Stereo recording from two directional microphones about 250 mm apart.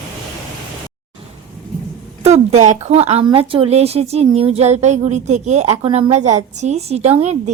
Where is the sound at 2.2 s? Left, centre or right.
Right.